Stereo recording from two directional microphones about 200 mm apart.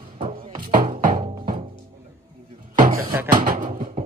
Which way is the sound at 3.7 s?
40° right (ahead or behind).